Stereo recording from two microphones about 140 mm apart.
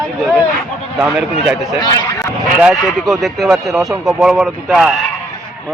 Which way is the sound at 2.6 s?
5° right (ahead or behind).